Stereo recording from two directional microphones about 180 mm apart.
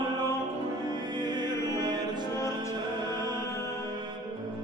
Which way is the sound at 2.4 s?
15° left (ahead or behind).